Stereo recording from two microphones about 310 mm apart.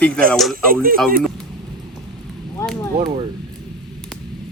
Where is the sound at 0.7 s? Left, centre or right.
Right.